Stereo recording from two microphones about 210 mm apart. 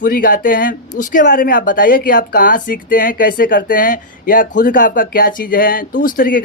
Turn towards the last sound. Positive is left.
turn(degrees=40)  # may be behind; listen again after turning